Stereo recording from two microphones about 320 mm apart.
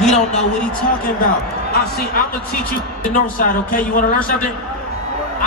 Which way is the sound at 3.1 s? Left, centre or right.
Left.